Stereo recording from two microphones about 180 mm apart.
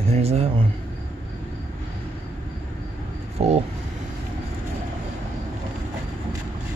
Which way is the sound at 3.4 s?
35° right (ahead or behind).